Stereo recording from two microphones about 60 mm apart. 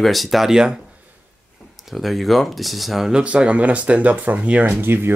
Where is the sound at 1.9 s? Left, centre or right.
Centre.